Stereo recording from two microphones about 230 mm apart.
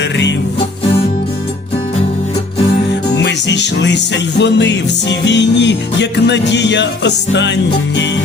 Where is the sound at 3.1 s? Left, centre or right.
Left.